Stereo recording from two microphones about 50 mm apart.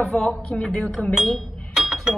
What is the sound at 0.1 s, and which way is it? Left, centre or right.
Speech, centre.